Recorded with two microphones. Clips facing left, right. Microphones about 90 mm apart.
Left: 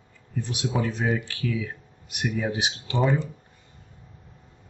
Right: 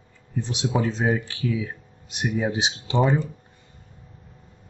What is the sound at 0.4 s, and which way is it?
Speech, 25° right (ahead or behind).